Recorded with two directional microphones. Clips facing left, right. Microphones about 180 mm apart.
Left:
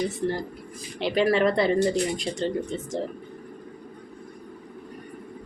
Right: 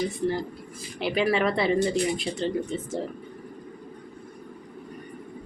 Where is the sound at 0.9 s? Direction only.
5° right (ahead or behind).